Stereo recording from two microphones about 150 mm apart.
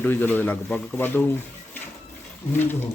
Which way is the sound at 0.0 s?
10° left (ahead or behind).